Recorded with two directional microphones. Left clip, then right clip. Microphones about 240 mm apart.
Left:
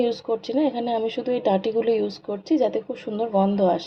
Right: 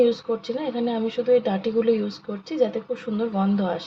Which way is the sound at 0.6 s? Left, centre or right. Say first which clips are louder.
Left 3 dB; left.